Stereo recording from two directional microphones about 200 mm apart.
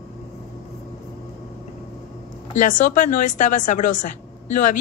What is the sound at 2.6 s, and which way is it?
Speech, 40° left (ahead or behind).